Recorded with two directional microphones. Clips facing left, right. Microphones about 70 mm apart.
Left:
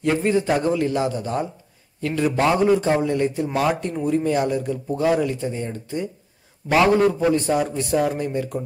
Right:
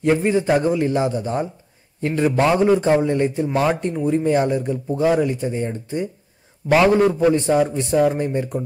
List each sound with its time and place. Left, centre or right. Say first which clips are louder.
0.0 s speech: right 2 dB; centre